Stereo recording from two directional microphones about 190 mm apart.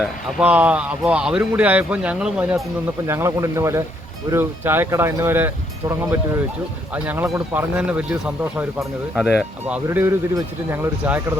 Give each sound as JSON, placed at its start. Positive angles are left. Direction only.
{"t": 0.0, "sound": "a man's voice", "side_deg": -5}
{"t": 6.9, "sound": "a man's voice", "side_deg": -10}